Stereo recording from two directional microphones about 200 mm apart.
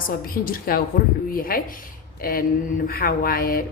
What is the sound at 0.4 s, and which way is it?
A woman's voice, 45° left (ahead or behind).